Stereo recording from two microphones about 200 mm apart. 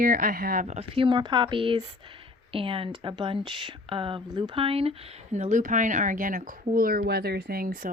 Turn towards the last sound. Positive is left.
turn(degrees=-45)  # may be behind; listen again after turning